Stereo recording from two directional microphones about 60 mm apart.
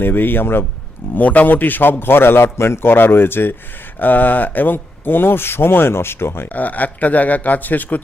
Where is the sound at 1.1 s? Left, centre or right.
Left.